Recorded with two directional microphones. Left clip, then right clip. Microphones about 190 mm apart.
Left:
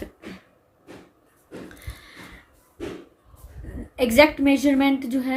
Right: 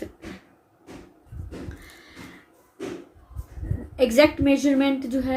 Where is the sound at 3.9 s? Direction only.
45° left (ahead or behind).